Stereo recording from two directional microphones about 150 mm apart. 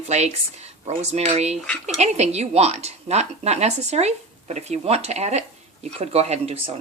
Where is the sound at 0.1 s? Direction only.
45° right (ahead or behind).